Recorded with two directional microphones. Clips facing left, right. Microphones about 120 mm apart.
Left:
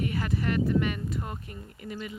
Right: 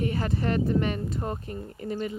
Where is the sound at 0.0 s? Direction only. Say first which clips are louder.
Right 2 dB; 30° right (ahead or behind).